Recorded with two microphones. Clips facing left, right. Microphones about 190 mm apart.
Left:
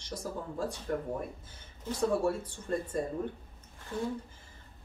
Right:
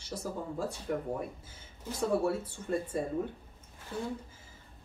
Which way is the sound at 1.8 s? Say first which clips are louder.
Left 1 dB; 5° right (ahead or behind).